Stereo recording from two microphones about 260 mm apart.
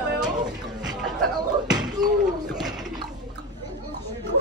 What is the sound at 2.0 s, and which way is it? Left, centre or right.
Speech, centre.